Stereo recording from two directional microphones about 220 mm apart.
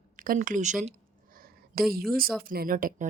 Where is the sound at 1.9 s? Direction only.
40° right (ahead or behind).